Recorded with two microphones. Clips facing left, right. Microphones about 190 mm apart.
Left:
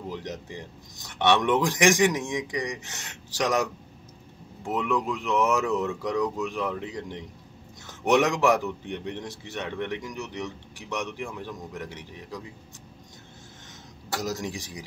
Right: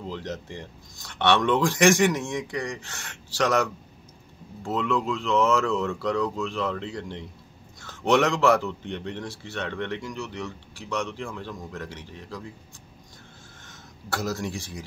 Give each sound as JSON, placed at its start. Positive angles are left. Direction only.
{"t": 0.0, "sound": "speech", "side_deg": 15}
{"t": 14.1, "sound": "speech", "side_deg": 15}